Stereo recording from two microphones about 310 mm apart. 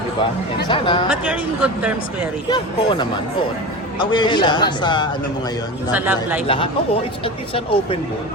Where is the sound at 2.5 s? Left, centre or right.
Centre.